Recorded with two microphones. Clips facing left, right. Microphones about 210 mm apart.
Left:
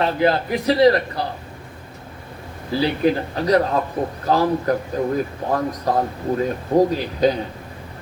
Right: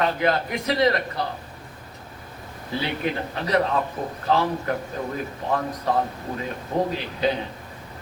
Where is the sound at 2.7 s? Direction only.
35° left (ahead or behind).